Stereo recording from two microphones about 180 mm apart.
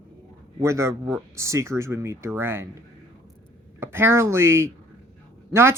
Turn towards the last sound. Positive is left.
turn(degrees=-15)  # may be behind; listen again after turning